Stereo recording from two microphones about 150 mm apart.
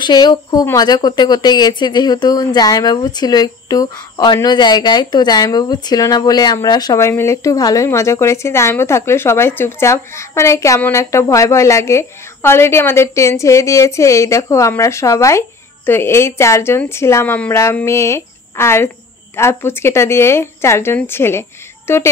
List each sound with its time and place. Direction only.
0.0 s speech: 30° left (ahead or behind)